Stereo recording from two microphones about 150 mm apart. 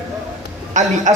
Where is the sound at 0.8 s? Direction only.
55° right (ahead or behind).